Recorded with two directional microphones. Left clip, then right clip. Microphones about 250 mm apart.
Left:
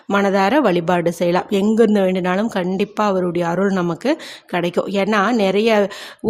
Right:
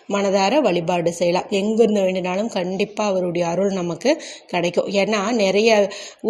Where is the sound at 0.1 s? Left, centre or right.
Centre.